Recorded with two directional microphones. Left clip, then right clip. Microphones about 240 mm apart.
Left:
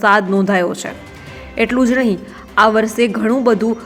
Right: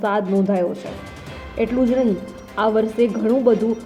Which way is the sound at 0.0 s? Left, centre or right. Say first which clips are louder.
Left 7 dB; centre.